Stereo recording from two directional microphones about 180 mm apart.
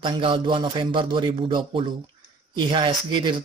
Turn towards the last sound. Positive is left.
turn(degrees=-25)  # may be behind; listen again after turning